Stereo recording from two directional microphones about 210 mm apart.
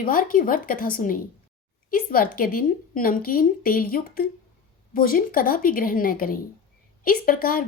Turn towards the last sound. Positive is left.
turn(degrees=45)  # may be behind; listen again after turning